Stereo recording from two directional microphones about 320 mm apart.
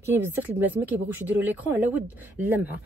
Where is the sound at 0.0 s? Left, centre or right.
Centre.